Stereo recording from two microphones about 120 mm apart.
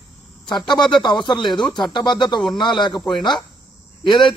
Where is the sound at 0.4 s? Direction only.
40° left (ahead or behind).